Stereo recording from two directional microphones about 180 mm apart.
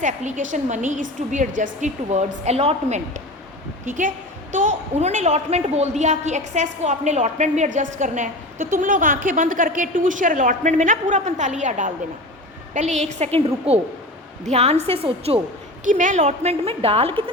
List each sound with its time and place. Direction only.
0.0 s a woman's voice: 45° right (ahead or behind)
15.8 s a woman's voice: 45° right (ahead or behind)